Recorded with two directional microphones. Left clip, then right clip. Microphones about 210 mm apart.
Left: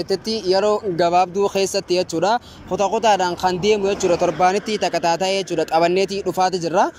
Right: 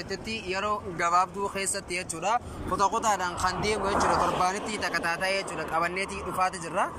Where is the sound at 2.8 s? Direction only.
35° left (ahead or behind).